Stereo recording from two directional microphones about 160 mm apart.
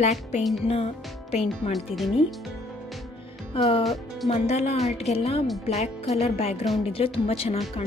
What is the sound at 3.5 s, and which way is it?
A woman's voice, 35° left (ahead or behind).